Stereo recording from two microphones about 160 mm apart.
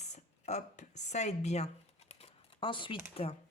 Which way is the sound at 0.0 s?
45° left (ahead or behind).